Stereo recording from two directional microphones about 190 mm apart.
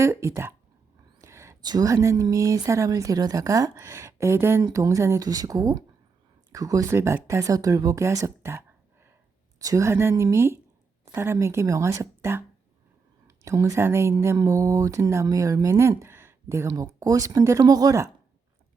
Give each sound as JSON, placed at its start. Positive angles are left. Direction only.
{"t": 0.0, "sound": "speech", "side_deg": -15}